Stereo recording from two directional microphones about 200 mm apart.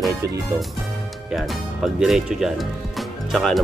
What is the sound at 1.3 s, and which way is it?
Speech, centre (ahead or behind).